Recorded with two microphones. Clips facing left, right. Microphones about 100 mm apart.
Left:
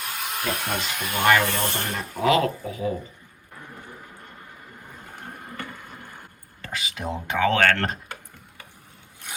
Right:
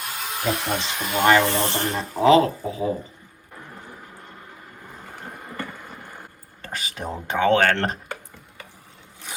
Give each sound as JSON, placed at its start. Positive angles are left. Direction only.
{"t": 0.0, "sound": "speech", "side_deg": -15}
{"t": 6.7, "sound": "speech", "side_deg": -40}
{"t": 7.3, "sound": "speech", "side_deg": -30}